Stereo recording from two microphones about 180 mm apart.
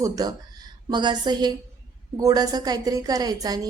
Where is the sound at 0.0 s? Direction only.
20° right (ahead or behind).